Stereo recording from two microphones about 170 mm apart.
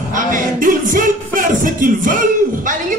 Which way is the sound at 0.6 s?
50° right (ahead or behind).